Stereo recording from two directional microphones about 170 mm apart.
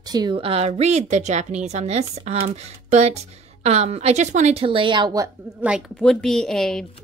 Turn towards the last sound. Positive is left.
turn(degrees=5)  # may be behind; listen again after turning